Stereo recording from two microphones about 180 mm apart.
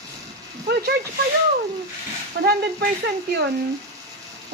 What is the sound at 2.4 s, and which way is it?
Speech, 65° right (ahead or behind).